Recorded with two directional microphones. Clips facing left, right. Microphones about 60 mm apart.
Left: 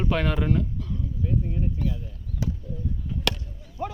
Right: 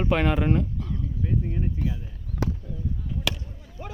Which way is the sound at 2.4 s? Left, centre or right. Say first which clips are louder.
Right 2 dB; right.